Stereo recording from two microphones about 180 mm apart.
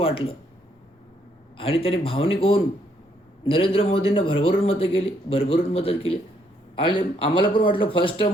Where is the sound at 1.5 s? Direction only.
30° left (ahead or behind).